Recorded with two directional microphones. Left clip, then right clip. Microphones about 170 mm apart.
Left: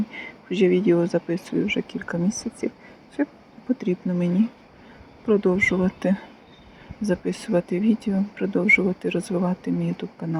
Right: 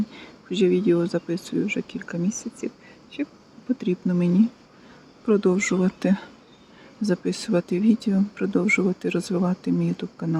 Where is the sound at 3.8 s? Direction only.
20° right (ahead or behind).